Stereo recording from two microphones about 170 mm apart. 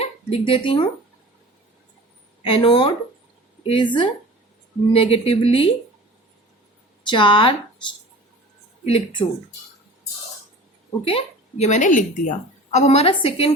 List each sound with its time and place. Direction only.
0.0 s speech: 35° left (ahead or behind)
2.4 s a woman's voice: 35° left (ahead or behind)
7.1 s a woman's voice: 30° left (ahead or behind)
8.8 s speech: 35° left (ahead or behind)
11.0 s speech: 35° left (ahead or behind)
12.7 s a woman's voice: 40° left (ahead or behind)